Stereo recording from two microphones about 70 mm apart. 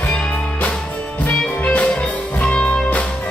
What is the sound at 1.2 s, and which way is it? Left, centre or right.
Music, centre.